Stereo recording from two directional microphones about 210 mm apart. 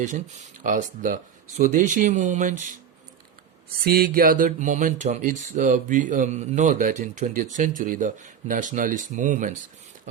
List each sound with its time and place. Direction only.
0.0 s speech: 35° right (ahead or behind)
3.8 s speech: 45° right (ahead or behind)